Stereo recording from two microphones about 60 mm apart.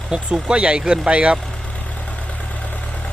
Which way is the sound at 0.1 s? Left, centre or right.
Centre.